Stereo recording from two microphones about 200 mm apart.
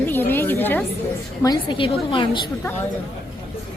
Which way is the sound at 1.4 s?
20° left (ahead or behind).